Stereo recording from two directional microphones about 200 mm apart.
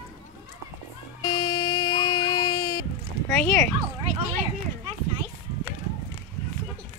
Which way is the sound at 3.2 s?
10° left (ahead or behind).